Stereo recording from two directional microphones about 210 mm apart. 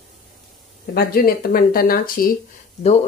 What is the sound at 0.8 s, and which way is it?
Speech, 45° left (ahead or behind).